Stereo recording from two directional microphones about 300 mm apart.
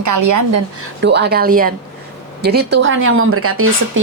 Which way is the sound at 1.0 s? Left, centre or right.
Right.